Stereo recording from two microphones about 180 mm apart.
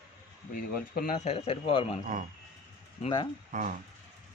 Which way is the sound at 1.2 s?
35° left (ahead or behind).